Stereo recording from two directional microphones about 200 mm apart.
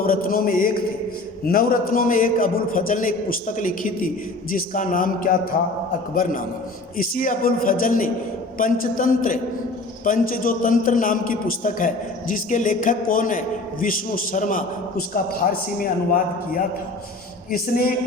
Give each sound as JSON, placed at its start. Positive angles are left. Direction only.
{"t": 0.0, "sound": "a man's voice", "side_deg": 45}
{"t": 6.9, "sound": "a man's voice", "side_deg": 45}
{"t": 17.5, "sound": "a man's voice", "side_deg": 45}